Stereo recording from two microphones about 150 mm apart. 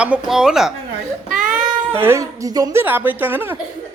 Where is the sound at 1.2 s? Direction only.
65° right (ahead or behind).